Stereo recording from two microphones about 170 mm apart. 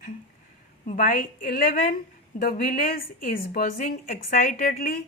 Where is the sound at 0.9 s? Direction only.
50° left (ahead or behind).